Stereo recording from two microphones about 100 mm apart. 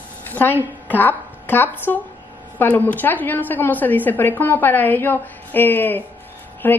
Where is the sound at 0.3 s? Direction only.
20° left (ahead or behind).